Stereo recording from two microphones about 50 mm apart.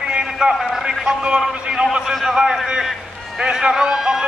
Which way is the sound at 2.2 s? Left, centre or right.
Centre.